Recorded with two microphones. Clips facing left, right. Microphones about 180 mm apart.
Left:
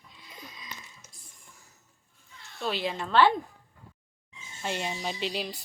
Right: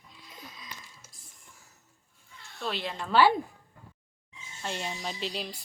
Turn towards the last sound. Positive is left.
turn(degrees=0)  # may be behind; listen again after turning